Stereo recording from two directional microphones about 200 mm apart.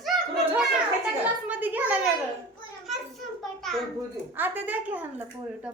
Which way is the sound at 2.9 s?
Centre (ahead or behind).